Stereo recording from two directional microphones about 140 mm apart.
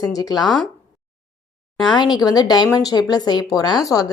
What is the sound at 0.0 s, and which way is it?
Speech, 25° left (ahead or behind).